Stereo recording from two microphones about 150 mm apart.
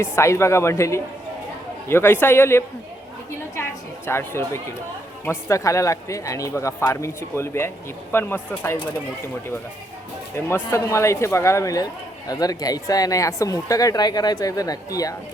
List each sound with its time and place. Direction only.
0.0 s a woman's voice: 20° left (ahead or behind)
10.3 s speech: 15° left (ahead or behind)